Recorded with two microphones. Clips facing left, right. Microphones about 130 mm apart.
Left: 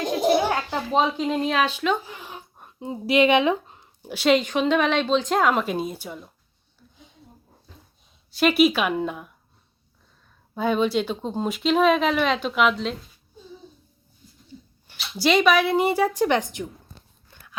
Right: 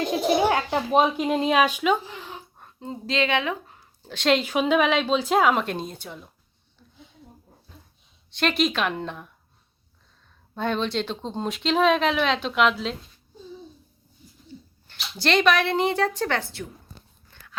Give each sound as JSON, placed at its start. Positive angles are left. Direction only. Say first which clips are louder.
{"t": 0.9, "sound": "speech", "louder": "right 1 dB", "side_deg": -15}
{"t": 2.2, "sound": "a sound", "louder": "even", "side_deg": 15}
{"t": 4.1, "sound": "speech", "louder": "left 2 dB", "side_deg": 5}
{"t": 8.3, "sound": "a woman's voice", "louder": "left 5 dB", "side_deg": 5}
{"t": 10.5, "sound": "speech", "louder": "left 4 dB", "side_deg": 5}
{"t": 14.8, "sound": "a woman's voice", "louder": "left 3 dB", "side_deg": 5}
{"t": 17.3, "sound": "biting", "louder": "left 1 dB", "side_deg": 15}